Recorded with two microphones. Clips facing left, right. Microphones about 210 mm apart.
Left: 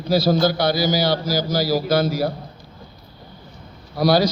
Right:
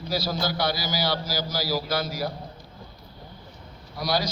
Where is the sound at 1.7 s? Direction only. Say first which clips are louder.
Left 9 dB; 55° left (ahead or behind).